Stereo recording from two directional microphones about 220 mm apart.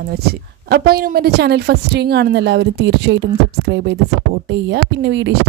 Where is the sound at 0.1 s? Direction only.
45° right (ahead or behind).